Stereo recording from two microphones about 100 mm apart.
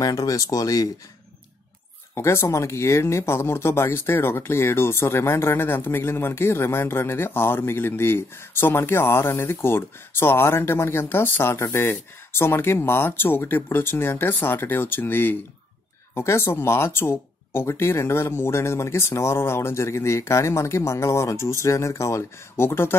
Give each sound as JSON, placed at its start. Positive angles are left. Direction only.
{"t": 0.0, "sound": "speech", "side_deg": 35}
{"t": 2.1, "sound": "speech", "side_deg": 25}